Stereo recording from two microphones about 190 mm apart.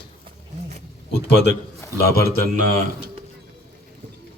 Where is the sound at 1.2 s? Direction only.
60° left (ahead or behind).